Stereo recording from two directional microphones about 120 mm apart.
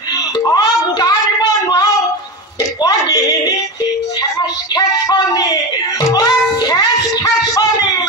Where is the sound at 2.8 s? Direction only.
30° left (ahead or behind).